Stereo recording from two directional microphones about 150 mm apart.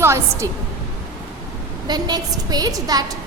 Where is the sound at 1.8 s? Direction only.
25° right (ahead or behind).